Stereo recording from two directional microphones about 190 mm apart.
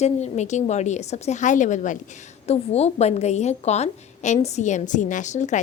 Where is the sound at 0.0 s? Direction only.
35° left (ahead or behind).